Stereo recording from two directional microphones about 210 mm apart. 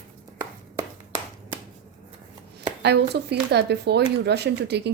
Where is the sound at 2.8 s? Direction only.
50° right (ahead or behind).